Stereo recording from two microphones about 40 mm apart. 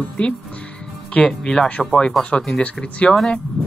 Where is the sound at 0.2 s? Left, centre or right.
Left.